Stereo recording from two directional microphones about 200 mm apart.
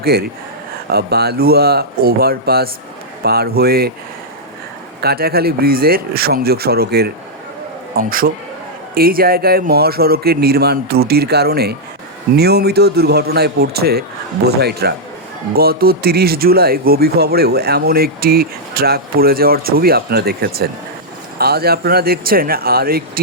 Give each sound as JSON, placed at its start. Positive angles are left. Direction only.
{"t": 0.0, "sound": "speech", "side_deg": -50}
{"t": 4.9, "sound": "speech", "side_deg": -50}